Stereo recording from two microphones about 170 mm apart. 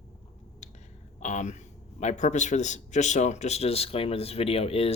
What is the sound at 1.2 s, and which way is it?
Speech, 45° left (ahead or behind).